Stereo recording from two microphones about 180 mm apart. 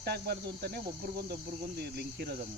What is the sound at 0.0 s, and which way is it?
Speech, 60° right (ahead or behind).